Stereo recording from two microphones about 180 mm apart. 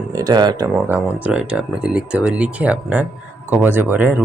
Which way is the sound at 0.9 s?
5° right (ahead or behind).